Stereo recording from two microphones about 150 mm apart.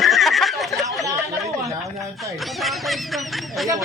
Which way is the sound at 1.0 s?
20° right (ahead or behind).